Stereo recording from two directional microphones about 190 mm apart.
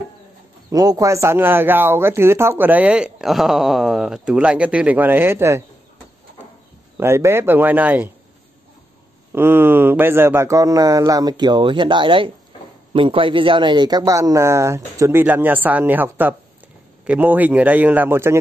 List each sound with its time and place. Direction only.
0.7 s speech: 20° right (ahead or behind)
7.0 s speech: 15° right (ahead or behind)
9.3 s speech: 10° right (ahead or behind)